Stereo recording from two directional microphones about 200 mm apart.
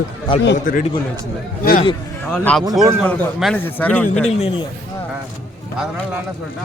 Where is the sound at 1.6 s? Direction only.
45° left (ahead or behind).